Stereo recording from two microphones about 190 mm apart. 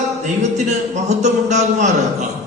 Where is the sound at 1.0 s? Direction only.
40° right (ahead or behind).